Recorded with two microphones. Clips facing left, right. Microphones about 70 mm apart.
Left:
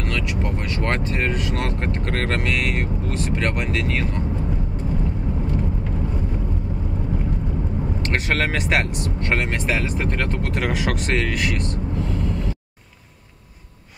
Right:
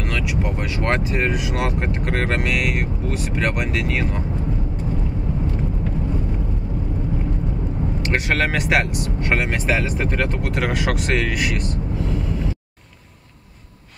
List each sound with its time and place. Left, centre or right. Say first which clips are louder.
0.0 s speech: right 1 dB; centre
8.0 s speech: right 2 dB; centre